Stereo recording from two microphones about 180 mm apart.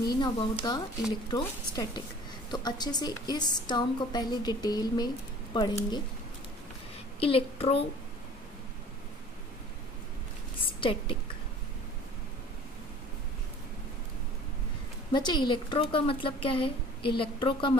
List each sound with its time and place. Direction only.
0.0 s a woman's voice: 25° left (ahead or behind)
7.2 s a woman's voice: 30° left (ahead or behind)
10.8 s a woman's voice: 30° left (ahead or behind)
15.1 s a woman's voice: 25° left (ahead or behind)